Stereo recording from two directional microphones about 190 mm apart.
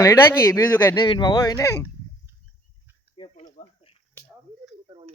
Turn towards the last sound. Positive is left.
turn(degrees=-25)  # may be behind; listen again after turning